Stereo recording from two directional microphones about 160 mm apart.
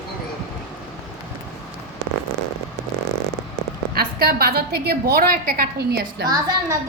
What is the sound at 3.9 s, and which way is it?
A woman's voice, 70° right (ahead or behind).